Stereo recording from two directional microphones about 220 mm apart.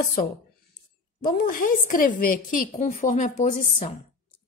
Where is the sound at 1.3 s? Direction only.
40° left (ahead or behind).